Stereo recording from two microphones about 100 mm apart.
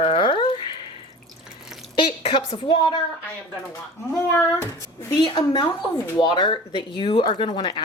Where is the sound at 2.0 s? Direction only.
55° left (ahead or behind).